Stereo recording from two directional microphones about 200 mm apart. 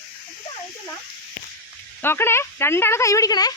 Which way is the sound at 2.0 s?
10° left (ahead or behind).